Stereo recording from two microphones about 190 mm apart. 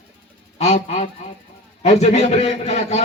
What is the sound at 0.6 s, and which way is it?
A man's voice, 35° left (ahead or behind).